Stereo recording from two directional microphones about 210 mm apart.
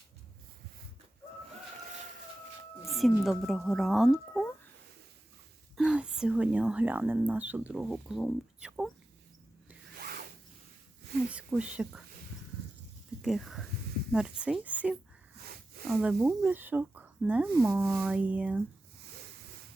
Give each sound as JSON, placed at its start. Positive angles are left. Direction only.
{"t": 2.8, "sound": "speech", "side_deg": 0}
{"t": 5.7, "sound": "speech", "side_deg": -5}
{"t": 10.0, "sound": "zipper", "side_deg": -45}
{"t": 11.3, "sound": "speech", "side_deg": -5}
{"t": 13.2, "sound": "speech", "side_deg": 0}